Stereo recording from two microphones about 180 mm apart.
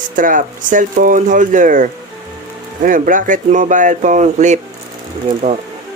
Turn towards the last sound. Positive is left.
turn(degrees=-40)  # may be behind; listen again after turning